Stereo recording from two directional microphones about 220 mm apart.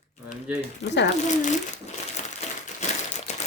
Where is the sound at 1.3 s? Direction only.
35° left (ahead or behind).